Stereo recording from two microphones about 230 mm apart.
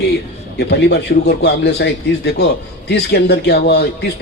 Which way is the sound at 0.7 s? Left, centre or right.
Left.